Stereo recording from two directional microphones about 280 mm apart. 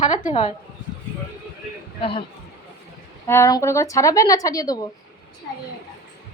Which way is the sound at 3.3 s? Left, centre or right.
Centre.